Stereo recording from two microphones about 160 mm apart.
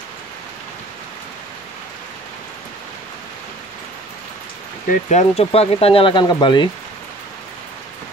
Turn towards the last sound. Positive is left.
turn(degrees=30)  # may be behind; listen again after turning